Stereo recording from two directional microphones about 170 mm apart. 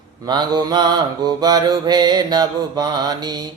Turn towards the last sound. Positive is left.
turn(degrees=-25)  # may be behind; listen again after turning